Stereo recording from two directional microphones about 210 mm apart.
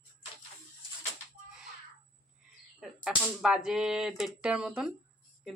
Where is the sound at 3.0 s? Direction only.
5° right (ahead or behind).